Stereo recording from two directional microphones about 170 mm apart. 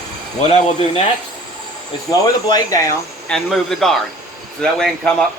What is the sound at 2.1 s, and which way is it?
Speech, 20° left (ahead or behind).